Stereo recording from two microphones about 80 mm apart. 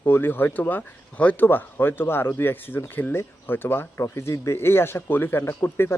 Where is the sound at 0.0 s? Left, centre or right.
Left.